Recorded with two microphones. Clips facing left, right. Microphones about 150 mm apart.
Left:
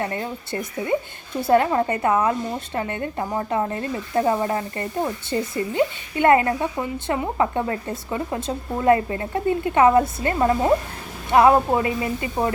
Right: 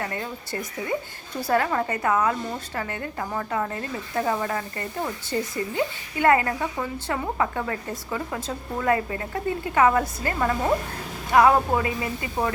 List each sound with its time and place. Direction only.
0.0 s a woman's voice: 25° left (ahead or behind)